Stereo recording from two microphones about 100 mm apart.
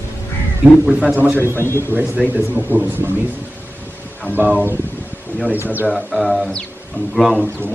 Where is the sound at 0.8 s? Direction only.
10° right (ahead or behind).